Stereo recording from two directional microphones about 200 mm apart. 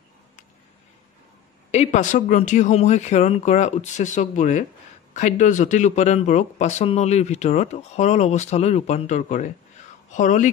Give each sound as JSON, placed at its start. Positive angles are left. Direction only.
{"t": 1.7, "sound": "speech", "side_deg": 35}